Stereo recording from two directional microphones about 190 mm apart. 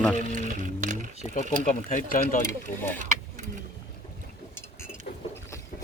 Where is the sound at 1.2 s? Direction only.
40° left (ahead or behind).